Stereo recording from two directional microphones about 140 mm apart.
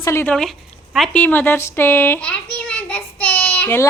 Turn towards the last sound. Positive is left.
turn(degrees=15)  # may be behind; listen again after turning